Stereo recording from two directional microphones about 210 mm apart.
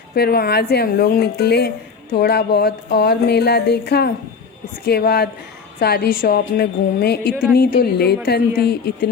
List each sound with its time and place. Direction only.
0.1 s a woman's voice: 50° left (ahead or behind)